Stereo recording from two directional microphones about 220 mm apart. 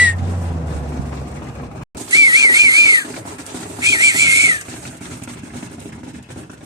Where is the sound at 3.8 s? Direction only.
15° right (ahead or behind).